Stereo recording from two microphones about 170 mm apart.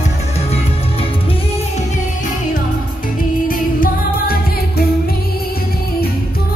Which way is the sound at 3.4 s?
55° left (ahead or behind).